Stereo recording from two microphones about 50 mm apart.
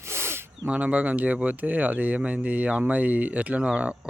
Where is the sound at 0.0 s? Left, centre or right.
Right.